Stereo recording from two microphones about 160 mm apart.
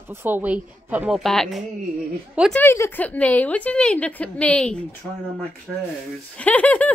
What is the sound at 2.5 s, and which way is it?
Speech, 15° left (ahead or behind).